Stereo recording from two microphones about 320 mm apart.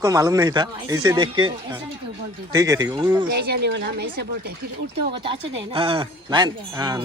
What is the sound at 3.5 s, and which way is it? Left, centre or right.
Speech, right.